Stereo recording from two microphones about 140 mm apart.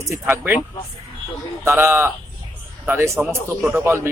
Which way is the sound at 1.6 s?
15° right (ahead or behind).